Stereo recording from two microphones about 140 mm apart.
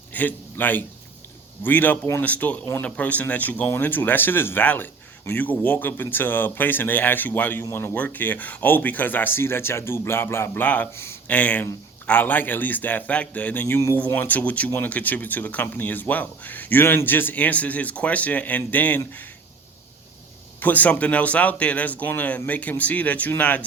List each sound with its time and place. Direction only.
0.1 s a man's voice: 10° left (ahead or behind)
20.6 s speech: 10° left (ahead or behind)